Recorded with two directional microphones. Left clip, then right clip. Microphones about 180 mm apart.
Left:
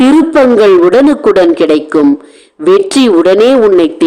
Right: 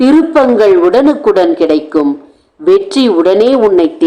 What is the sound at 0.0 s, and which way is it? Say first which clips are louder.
A man's voice: left 1 dB; 35° left (ahead or behind).